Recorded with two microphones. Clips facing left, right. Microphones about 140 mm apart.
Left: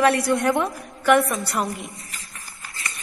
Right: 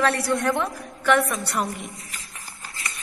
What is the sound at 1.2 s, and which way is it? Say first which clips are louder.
Speech: left 1 dB; centre (ahead or behind).